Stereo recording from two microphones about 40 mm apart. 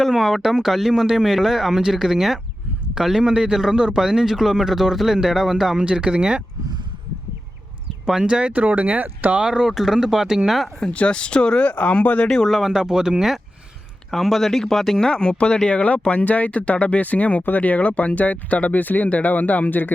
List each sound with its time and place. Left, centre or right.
0.2 s speech: centre
5.8 s speech: right
8.2 s speech: right
8.5 s speech: right
9.4 s speech: centre
9.6 s speech: centre
10.9 s speech: left
11.6 s speech: left
12.5 s speech: centre
12.7 s speech: centre
14.1 s speech: centre
15.0 s speech: left